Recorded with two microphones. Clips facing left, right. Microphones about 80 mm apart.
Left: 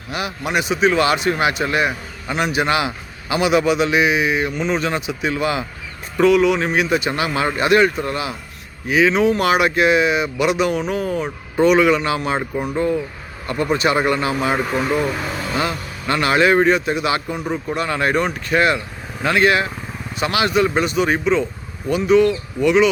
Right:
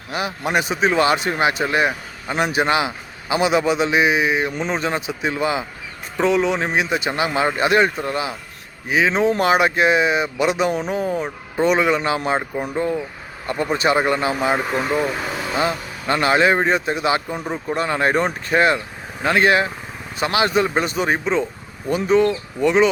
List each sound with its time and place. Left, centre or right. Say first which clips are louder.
0.1 s speech: right 1 dB; right
13.7 s speech: even; right
14.5 s speech: left 1 dB; centre
16.0 s speech: left 1 dB; right
17.4 s speech: left 1 dB; centre
17.7 s speech: right 1 dB; right